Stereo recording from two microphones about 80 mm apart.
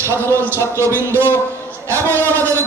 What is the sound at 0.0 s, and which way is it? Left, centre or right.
Speech, right.